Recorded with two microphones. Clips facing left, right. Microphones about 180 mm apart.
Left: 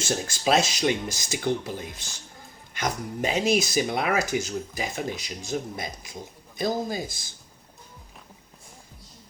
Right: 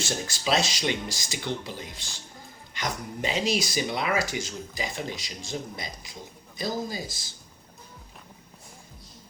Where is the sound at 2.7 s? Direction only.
50° left (ahead or behind).